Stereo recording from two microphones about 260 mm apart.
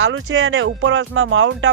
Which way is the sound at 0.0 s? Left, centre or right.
Right.